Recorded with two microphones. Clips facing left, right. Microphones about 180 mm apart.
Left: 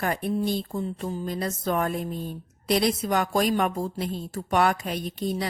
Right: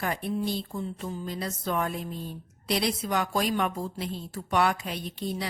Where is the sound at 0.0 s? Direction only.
50° left (ahead or behind).